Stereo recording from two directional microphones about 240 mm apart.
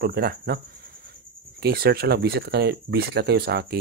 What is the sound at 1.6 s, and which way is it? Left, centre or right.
Speech, right.